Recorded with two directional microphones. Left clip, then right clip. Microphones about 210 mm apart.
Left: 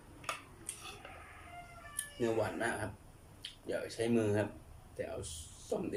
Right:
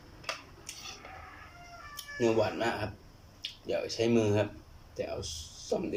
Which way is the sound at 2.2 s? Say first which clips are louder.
Right 6 dB; 5° right (ahead or behind).